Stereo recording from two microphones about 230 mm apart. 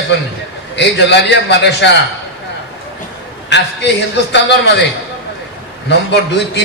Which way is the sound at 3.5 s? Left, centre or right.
Left.